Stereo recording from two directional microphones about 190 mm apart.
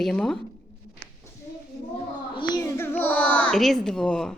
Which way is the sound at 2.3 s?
25° left (ahead or behind).